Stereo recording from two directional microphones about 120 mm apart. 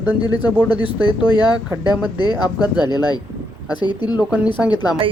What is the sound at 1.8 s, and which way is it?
Speech, 35° left (ahead or behind).